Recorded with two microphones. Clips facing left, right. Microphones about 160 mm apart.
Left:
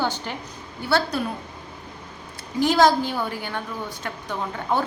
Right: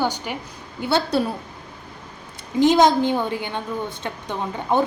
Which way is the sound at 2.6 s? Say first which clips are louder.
Right 3 dB; 20° right (ahead or behind).